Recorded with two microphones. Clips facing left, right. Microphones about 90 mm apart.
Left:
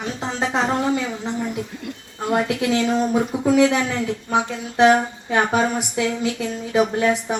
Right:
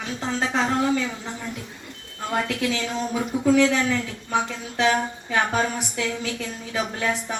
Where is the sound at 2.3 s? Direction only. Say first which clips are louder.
Left 5 dB; 10° left (ahead or behind).